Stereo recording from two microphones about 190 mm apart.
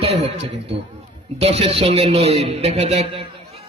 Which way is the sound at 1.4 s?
30° right (ahead or behind).